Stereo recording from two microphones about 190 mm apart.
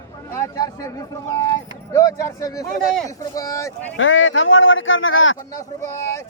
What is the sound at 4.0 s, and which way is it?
Speech, 90° left.